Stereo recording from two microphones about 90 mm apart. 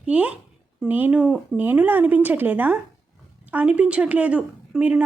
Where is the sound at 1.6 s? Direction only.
20° right (ahead or behind).